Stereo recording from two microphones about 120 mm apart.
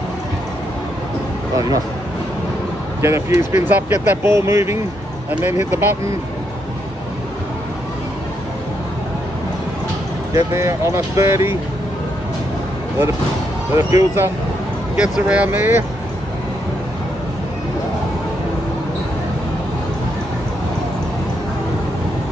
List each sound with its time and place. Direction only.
3.0 s speech: 20° right (ahead or behind)
10.3 s speech: 25° right (ahead or behind)
13.7 s speech: 20° right (ahead or behind)
15.0 s speech: 10° right (ahead or behind)